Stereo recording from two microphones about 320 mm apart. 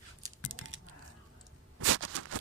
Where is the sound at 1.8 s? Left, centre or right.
Right.